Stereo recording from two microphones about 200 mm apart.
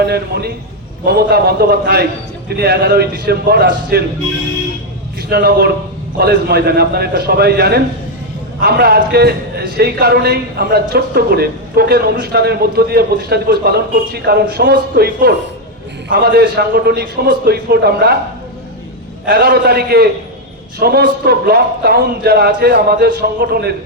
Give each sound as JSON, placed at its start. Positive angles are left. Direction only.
{"t": 0.0, "sound": "a man's voice", "side_deg": -55}
{"t": 5.3, "sound": "a man's voice", "side_deg": -55}
{"t": 19.2, "sound": "a man's voice", "side_deg": -55}